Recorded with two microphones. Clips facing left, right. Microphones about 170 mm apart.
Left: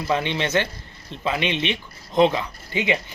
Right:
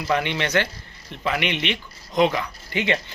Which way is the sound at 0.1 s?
20° left (ahead or behind).